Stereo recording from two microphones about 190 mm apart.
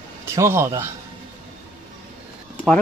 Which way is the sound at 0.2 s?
15° right (ahead or behind).